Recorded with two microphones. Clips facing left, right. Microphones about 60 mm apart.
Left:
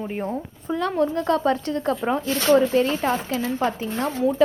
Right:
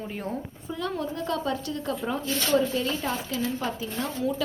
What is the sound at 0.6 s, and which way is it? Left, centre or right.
Speech, left.